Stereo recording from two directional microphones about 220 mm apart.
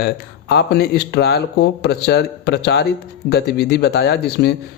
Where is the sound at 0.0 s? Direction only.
50° left (ahead or behind).